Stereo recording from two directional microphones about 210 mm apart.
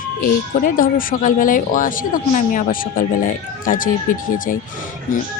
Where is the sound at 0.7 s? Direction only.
40° left (ahead or behind).